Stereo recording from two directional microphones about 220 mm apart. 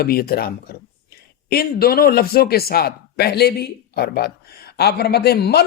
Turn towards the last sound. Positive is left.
turn(degrees=45)  # may be behind; listen again after turning